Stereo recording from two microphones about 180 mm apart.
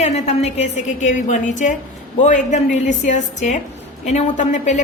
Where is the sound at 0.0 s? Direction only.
35° left (ahead or behind).